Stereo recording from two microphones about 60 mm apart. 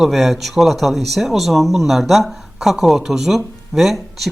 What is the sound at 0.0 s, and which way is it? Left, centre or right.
Speech, centre.